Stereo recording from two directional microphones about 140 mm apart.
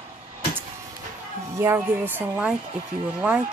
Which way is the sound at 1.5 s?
15° right (ahead or behind).